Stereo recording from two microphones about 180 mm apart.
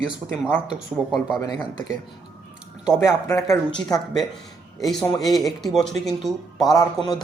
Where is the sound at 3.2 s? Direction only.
15° left (ahead or behind).